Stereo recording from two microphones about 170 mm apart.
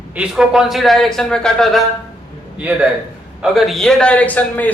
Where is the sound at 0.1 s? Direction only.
5° right (ahead or behind).